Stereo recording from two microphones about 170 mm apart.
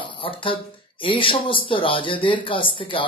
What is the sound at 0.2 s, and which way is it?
Speech, 30° left (ahead or behind).